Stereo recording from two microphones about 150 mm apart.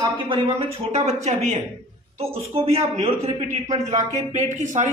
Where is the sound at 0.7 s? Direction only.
45° right (ahead or behind).